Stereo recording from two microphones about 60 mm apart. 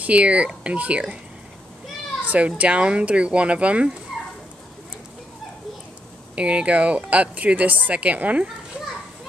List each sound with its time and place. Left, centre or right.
0.0 s speech: right
2.2 s speech: right
6.3 s speech: centre